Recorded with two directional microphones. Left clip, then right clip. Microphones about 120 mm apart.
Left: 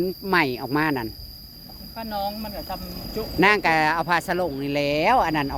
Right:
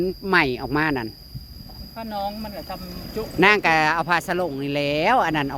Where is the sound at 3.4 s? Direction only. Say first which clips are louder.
Right 2 dB; 20° right (ahead or behind).